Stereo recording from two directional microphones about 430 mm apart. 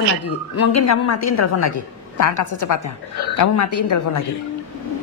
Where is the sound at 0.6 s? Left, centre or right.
Left.